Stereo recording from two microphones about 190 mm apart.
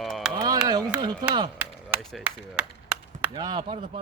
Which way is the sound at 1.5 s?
Centre (ahead or behind).